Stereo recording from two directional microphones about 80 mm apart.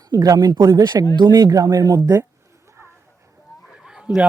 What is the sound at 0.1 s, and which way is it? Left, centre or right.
Speech, right.